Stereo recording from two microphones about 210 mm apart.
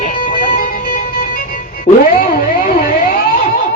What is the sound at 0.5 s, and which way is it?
Music, 45° left (ahead or behind).